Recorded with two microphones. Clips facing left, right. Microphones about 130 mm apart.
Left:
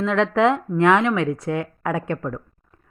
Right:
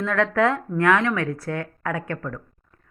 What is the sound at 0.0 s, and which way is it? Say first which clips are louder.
Speech: left 3 dB; 20° left (ahead or behind).